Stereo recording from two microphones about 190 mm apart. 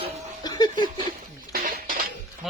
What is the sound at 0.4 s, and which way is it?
Chuckle, 20° left (ahead or behind).